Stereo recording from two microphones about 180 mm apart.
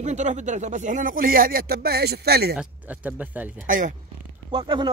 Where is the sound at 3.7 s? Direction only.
45° right (ahead or behind).